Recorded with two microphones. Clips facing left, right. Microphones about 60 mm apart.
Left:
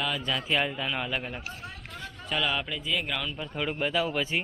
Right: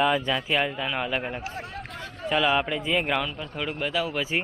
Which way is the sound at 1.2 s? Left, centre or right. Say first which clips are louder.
Right 5 dB; right.